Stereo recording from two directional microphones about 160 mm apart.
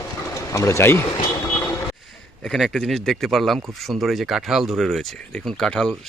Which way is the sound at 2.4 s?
5° left (ahead or behind).